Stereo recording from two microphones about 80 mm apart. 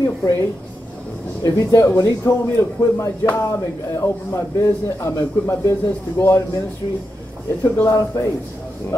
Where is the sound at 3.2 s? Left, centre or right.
Left.